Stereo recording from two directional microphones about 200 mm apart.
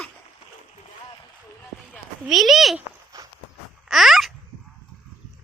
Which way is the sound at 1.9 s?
Centre (ahead or behind).